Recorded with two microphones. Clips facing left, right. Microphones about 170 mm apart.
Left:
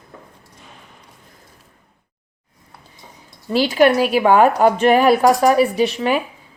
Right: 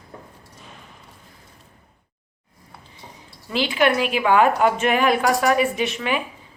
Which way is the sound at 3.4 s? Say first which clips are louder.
Left 6 dB; 40° left (ahead or behind).